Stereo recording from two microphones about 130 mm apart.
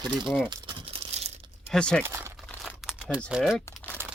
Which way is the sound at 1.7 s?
5° left (ahead or behind).